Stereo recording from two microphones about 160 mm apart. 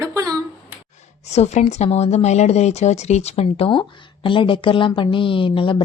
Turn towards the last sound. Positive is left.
turn(degrees=35)  # may be behind; listen again after turning